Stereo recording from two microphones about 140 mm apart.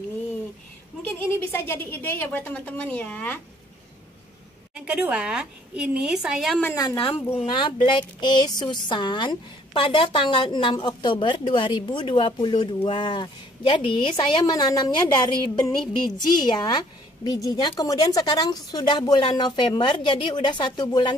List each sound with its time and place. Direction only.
1.0 s a woman's voice: 15° left (ahead or behind)
4.7 s speech: 10° right (ahead or behind)
6.7 s a woman's voice: 25° left (ahead or behind)
7.0 s a woman's voice: 40° left (ahead or behind)